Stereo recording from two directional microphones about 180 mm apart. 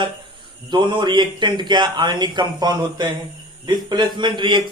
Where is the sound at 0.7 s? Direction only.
25° right (ahead or behind).